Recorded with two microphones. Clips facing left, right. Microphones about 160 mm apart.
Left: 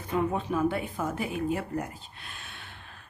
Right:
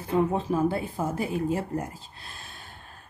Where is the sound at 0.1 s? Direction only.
30° right (ahead or behind).